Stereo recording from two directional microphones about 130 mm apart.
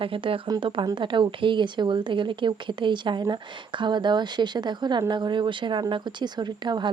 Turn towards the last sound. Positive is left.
turn(degrees=-35)  # may be behind; listen again after turning